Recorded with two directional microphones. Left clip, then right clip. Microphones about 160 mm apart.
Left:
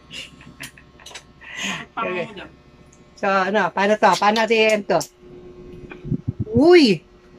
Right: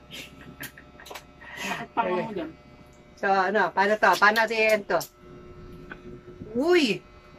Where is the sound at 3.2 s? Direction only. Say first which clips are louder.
Left 4 dB; 10° left (ahead or behind).